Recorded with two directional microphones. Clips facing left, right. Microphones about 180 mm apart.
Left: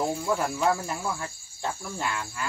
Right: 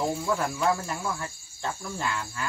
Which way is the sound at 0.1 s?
Centre (ahead or behind).